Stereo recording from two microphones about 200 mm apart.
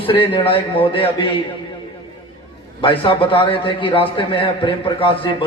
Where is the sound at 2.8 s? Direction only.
25° left (ahead or behind).